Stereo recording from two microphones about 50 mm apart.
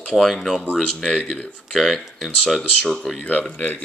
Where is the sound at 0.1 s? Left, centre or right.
Centre.